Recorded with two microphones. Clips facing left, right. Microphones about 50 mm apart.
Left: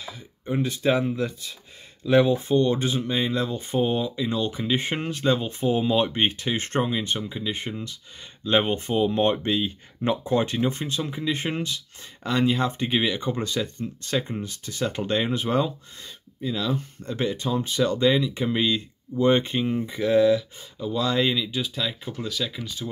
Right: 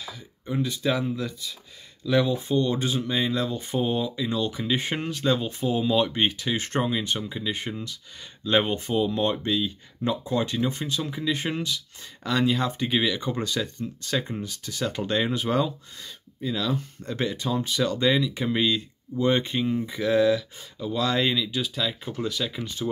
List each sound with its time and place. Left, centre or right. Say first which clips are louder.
0.0 s a sound: left 1 dB; left
0.6 s speech: left 3 dB; left
3.1 s speech: left 1 dB; centre
6.8 s speech: left 1 dB; centre
13.6 s speech: left 1 dB; centre
14.4 s speech: left 1 dB; centre
22.0 s speech: right 1 dB; centre
22.6 s speech: right 2 dB; right